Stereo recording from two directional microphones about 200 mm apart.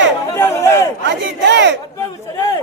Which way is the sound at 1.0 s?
60° right (ahead or behind).